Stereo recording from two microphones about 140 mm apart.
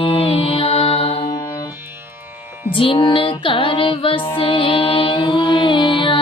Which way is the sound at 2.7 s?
35° left (ahead or behind).